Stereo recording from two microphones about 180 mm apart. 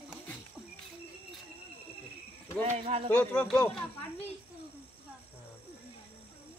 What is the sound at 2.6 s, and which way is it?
Speech, 35° right (ahead or behind).